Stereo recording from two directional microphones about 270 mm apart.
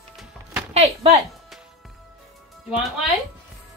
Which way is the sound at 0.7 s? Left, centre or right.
Right.